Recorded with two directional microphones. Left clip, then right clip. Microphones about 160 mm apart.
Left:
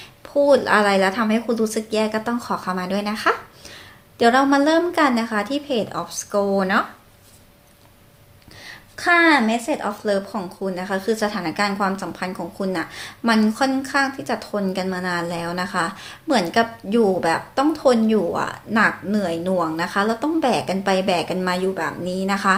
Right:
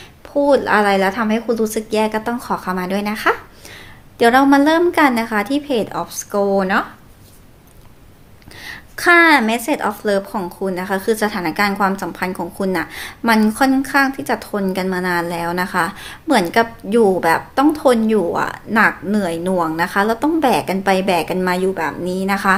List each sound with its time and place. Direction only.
0.3 s a woman's voice: 15° right (ahead or behind)
8.6 s a woman's voice: 30° right (ahead or behind)